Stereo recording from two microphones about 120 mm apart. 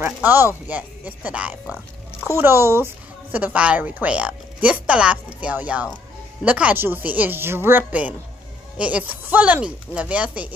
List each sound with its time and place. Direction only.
0.0 s a woman's voice: 15° right (ahead or behind)